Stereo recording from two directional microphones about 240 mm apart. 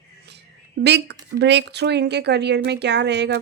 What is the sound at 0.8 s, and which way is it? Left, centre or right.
Speech, right.